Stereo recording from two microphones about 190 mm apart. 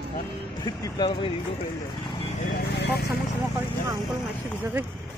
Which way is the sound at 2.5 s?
60° left (ahead or behind).